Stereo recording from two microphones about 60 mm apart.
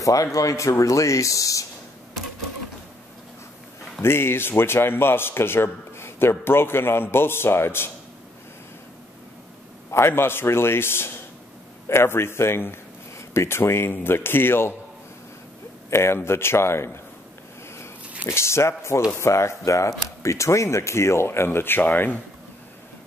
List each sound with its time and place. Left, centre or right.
0.0 s speech: left
4.0 s speech: left
9.8 s speech: left
15.9 s speech: left
18.2 s speech: left